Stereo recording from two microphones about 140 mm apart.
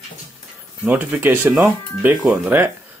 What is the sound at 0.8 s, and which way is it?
Speech, 15° right (ahead or behind).